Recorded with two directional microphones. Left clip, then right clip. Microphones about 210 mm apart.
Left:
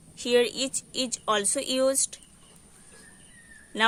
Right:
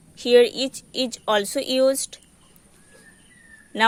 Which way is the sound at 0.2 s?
20° right (ahead or behind).